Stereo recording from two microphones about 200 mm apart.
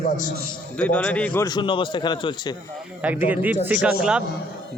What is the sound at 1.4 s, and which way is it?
A man's voice, 20° left (ahead or behind).